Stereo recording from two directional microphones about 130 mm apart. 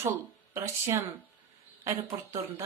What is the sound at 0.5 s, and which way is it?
Speech, 25° right (ahead or behind).